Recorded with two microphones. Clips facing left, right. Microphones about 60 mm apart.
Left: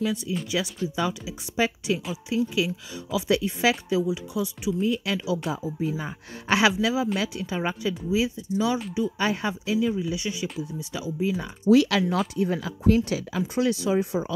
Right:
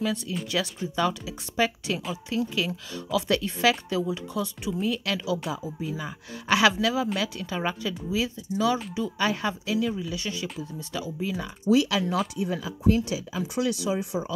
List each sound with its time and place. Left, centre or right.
0.0 s a woman's voice: centre
5.8 s a woman's voice: left
9.8 s a woman's voice: centre
11.6 s speech: left
13.6 s speech: left